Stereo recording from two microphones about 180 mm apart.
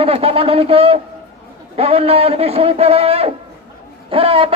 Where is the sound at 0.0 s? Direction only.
30° right (ahead or behind).